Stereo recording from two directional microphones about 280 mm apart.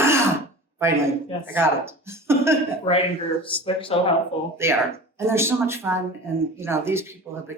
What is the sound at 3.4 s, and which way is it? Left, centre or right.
Speech, centre.